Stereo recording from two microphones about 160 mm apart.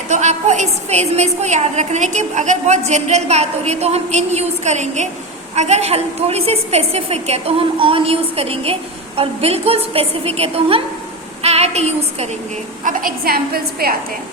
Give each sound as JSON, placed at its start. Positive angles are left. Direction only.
{"t": 0.1, "sound": "a woman's voice", "side_deg": -45}
{"t": 11.4, "sound": "a sound", "side_deg": -40}
{"t": 12.8, "sound": "a woman's voice", "side_deg": -60}